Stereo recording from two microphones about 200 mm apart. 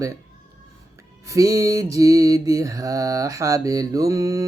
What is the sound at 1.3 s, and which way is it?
Mantra, 15° right (ahead or behind).